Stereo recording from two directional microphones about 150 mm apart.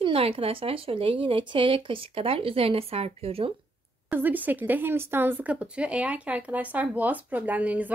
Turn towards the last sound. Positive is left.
turn(degrees=-10)  # may be behind; listen again after turning